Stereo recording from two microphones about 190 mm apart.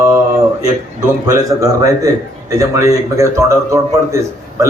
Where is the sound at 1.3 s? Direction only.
20° right (ahead or behind).